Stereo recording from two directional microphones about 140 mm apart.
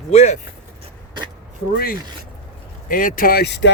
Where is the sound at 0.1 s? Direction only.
50° left (ahead or behind).